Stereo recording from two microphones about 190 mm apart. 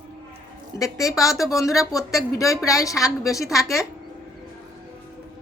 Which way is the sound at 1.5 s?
15° left (ahead or behind).